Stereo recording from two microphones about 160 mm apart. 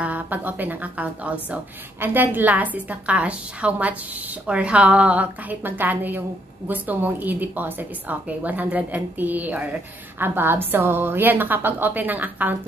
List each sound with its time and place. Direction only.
0.0 s a woman's voice: 10° right (ahead or behind)